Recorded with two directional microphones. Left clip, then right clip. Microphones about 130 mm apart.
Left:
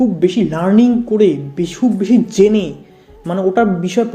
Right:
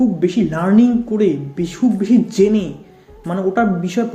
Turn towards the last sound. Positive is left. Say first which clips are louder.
# left 4 dB
turn(degrees=35)  # may be behind; listen again after turning